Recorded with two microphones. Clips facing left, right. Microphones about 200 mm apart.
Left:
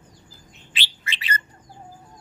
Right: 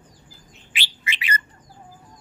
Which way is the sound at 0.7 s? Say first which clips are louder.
Right 2 dB; 15° right (ahead or behind).